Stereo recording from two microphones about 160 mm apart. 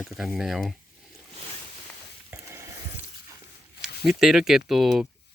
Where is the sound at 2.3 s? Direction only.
15° right (ahead or behind).